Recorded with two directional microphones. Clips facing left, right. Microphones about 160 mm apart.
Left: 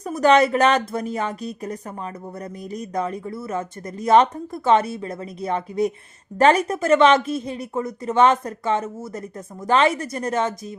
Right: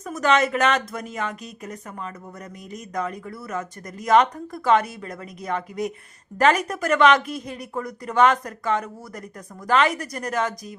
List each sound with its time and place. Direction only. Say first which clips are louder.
0.0 s speech: left 5 dB; 35° left (ahead or behind)